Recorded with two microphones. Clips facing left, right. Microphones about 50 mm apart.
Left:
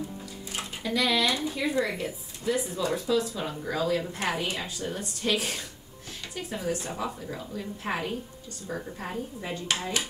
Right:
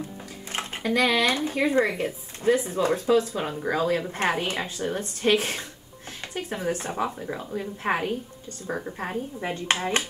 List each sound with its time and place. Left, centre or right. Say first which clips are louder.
0.5 s speech: right 5 dB; right